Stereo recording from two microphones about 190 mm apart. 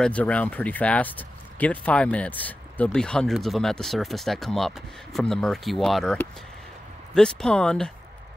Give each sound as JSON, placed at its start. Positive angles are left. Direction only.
{"t": 0.0, "sound": "speech", "side_deg": 5}